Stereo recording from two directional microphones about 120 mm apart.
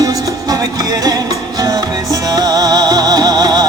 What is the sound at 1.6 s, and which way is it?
Music, 30° right (ahead or behind).